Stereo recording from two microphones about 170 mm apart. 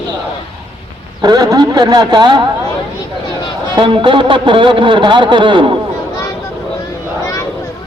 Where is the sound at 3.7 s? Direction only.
25° right (ahead or behind).